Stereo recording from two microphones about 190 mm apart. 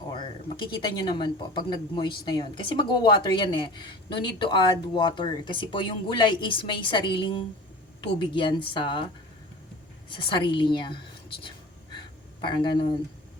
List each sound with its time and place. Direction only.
0.1 s speech: 25° left (ahead or behind)
10.1 s speech: 25° left (ahead or behind)
11.4 s a sound: 25° left (ahead or behind)